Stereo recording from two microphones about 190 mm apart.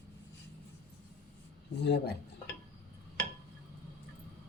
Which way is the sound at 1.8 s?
60° left (ahead or behind).